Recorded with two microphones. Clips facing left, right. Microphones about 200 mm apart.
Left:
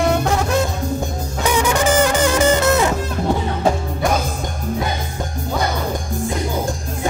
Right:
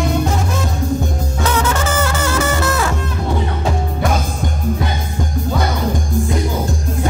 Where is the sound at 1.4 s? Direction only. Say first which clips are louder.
Left 2 dB; 15° left (ahead or behind).